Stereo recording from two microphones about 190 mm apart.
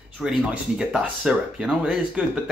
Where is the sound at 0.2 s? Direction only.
Centre (ahead or behind).